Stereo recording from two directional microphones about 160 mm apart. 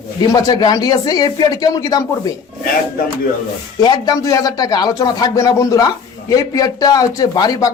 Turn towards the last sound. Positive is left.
turn(degrees=25)  # may be behind; listen again after turning